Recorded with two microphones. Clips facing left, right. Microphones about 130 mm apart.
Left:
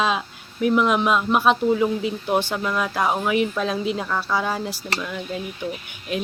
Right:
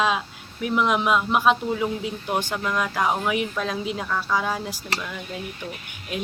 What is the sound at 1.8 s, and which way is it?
Speech, 5° left (ahead or behind).